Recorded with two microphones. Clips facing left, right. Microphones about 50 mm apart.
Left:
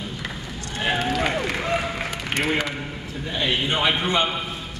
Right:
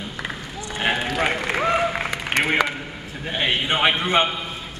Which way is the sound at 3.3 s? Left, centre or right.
Right.